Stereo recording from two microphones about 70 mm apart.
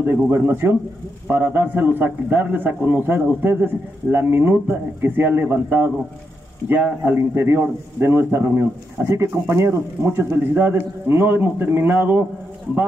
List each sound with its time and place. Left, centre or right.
0.0 s a man's voice: right